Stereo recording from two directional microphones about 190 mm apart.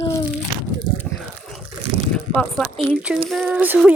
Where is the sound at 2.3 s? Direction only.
5° left (ahead or behind).